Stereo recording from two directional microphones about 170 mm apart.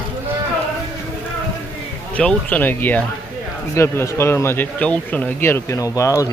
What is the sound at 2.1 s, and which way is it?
Speech, 10° left (ahead or behind).